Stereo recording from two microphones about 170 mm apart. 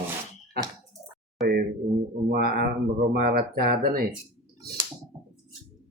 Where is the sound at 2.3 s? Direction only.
60° right (ahead or behind).